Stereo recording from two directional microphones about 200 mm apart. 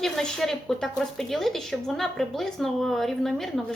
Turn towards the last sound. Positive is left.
turn(degrees=0)  # may be behind; listen again after turning